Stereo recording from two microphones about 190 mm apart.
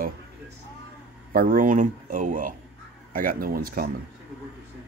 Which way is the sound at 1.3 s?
50° right (ahead or behind).